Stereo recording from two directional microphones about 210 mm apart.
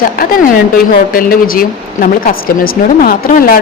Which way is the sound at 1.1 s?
45° left (ahead or behind).